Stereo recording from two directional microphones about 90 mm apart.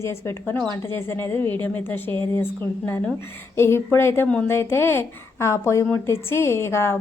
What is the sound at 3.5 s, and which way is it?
Speech, 30° left (ahead or behind).